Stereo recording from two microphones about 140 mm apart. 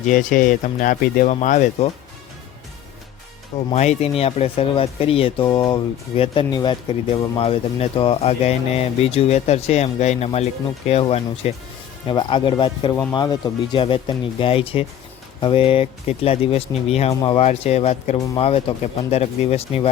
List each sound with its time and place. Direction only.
0.1 s speech: 70° left (ahead or behind)
3.8 s speech: 50° left (ahead or behind)
12.0 s speech: 35° left (ahead or behind)